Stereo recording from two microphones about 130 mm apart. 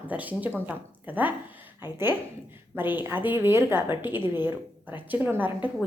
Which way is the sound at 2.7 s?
15° right (ahead or behind).